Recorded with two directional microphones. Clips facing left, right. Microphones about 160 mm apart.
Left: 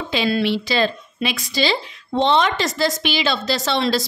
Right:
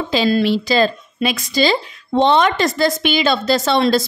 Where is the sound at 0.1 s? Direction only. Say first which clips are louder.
Right 4 dB; 40° right (ahead or behind).